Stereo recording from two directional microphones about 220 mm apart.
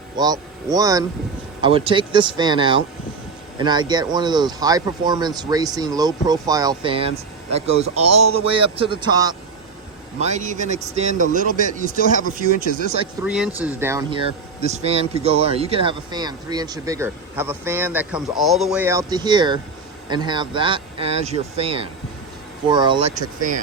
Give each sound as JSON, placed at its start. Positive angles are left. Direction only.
{"t": 0.2, "sound": "speech", "side_deg": -15}
{"t": 10.2, "sound": "a man's voice", "side_deg": -30}
{"t": 13.2, "sound": "speech", "side_deg": -5}
{"t": 14.1, "sound": "speech", "side_deg": -25}